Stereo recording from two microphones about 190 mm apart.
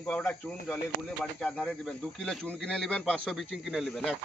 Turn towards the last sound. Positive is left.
turn(degrees=0)  # may be behind; listen again after turning